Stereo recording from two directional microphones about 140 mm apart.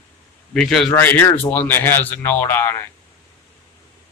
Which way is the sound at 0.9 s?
15° left (ahead or behind).